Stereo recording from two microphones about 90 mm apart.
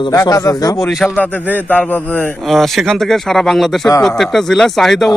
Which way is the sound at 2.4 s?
Centre (ahead or behind).